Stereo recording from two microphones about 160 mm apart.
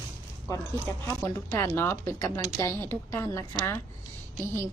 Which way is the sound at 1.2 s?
15° left (ahead or behind).